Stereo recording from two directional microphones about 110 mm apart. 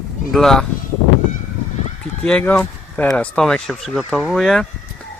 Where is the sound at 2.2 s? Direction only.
10° left (ahead or behind).